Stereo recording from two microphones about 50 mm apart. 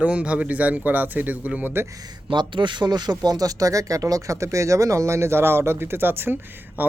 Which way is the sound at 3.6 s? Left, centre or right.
Right.